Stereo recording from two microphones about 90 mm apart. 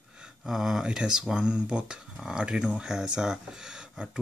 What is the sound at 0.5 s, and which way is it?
Speech, 5° right (ahead or behind).